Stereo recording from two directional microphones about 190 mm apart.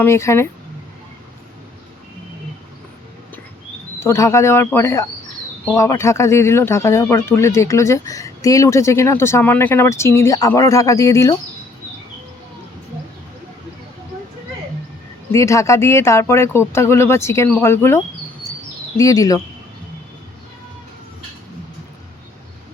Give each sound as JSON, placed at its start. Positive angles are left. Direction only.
{"t": 0.0, "sound": "speech", "side_deg": 15}
{"t": 4.0, "sound": "speech", "side_deg": 15}
{"t": 15.3, "sound": "speech", "side_deg": 15}